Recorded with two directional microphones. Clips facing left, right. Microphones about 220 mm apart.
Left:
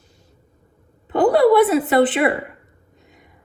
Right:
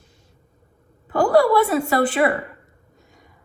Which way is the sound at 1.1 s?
20° left (ahead or behind).